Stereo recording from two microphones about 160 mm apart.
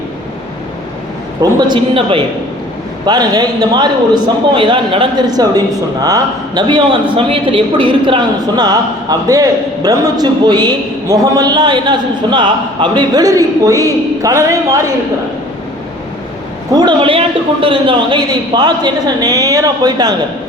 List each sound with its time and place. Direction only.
1.4 s a woman's voice: 30° right (ahead or behind)
16.7 s a man's voice: 30° right (ahead or behind)